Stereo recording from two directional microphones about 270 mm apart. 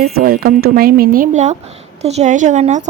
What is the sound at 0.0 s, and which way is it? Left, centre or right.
A woman's voice, right.